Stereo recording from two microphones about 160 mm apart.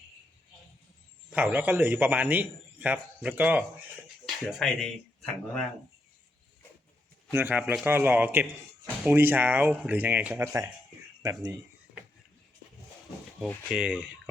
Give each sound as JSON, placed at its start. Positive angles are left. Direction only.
{"t": 1.3, "sound": "a man's voice", "side_deg": -10}
{"t": 7.3, "sound": "a man's voice", "side_deg": -15}
{"t": 13.7, "sound": "a man's voice", "side_deg": -5}